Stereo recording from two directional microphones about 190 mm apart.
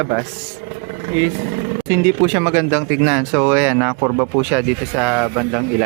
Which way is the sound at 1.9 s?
10° right (ahead or behind).